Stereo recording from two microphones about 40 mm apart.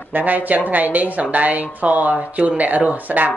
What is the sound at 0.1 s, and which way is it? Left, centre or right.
A woman's voice, right.